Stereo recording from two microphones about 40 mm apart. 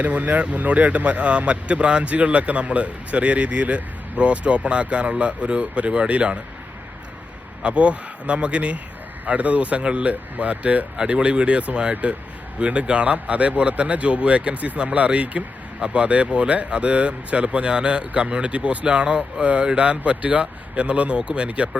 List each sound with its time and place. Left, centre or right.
0.0 s speech: right
7.6 s speech: right
10.9 s speech: right